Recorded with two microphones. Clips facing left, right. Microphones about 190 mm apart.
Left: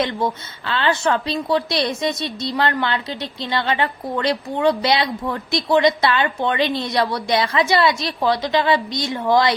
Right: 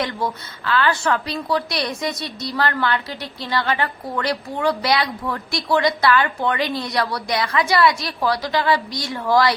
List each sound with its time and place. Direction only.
0.0 s a woman's voice: 20° left (ahead or behind)